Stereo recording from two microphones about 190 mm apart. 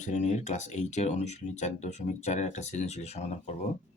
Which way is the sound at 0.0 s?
40° left (ahead or behind).